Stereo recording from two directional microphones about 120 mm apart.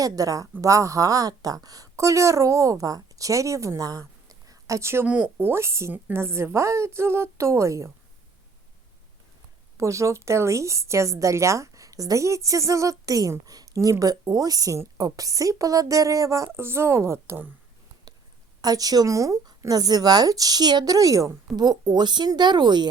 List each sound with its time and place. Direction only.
0.0 s a woman's voice: 30° right (ahead or behind)
5.0 s a woman's voice: 10° right (ahead or behind)
9.7 s a woman's voice: 25° right (ahead or behind)
18.6 s a woman's voice: 30° right (ahead or behind)